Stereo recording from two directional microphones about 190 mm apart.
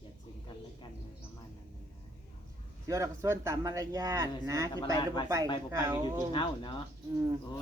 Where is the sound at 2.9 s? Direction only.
15° right (ahead or behind).